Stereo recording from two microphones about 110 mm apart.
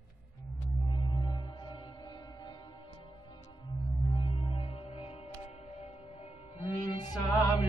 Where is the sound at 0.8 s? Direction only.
45° left (ahead or behind); by 6.6 s 60° left (ahead or behind).